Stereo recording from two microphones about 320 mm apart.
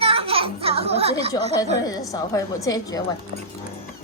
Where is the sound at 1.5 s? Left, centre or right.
Centre.